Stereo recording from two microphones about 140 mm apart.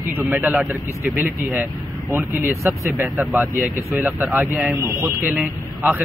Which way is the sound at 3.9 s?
15° right (ahead or behind).